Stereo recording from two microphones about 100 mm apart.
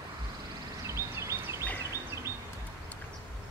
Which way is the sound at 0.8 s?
30° right (ahead or behind).